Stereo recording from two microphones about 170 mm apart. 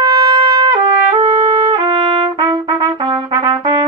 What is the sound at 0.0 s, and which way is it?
Trumpet, 25° right (ahead or behind).